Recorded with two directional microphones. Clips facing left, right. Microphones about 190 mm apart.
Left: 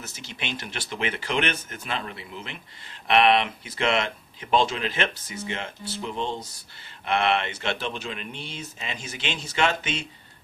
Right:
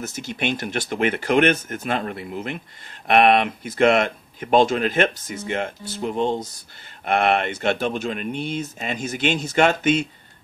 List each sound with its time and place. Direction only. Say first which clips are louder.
0.0 s speech: right 10 dB; 45° right (ahead or behind)